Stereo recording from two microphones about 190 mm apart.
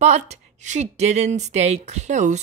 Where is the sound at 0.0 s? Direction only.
35° right (ahead or behind).